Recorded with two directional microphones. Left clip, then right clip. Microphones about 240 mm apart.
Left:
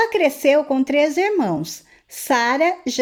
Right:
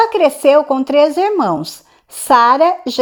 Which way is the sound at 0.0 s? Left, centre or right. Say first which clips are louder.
Right 6 dB; centre.